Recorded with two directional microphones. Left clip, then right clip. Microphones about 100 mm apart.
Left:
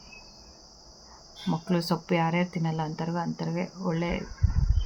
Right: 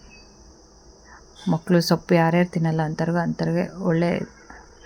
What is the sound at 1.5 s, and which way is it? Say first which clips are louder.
Speech: right 8 dB; 50° right (ahead or behind).